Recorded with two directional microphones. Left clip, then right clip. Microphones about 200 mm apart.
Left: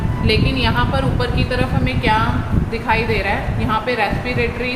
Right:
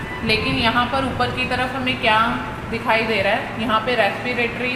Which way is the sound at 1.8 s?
20° left (ahead or behind).